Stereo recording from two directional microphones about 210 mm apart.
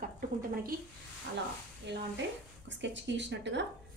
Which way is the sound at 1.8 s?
55° right (ahead or behind).